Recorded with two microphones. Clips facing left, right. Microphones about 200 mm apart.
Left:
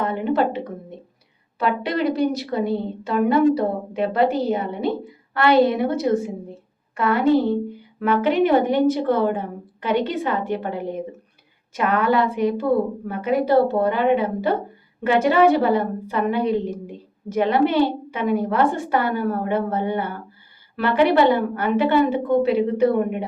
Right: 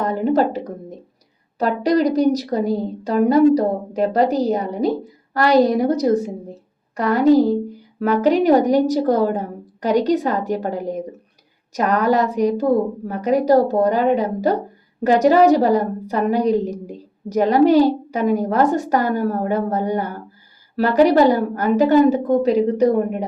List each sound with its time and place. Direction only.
0.0 s a woman's voice: 40° right (ahead or behind)